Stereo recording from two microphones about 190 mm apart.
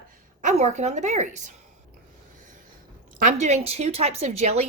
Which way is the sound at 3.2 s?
40° right (ahead or behind).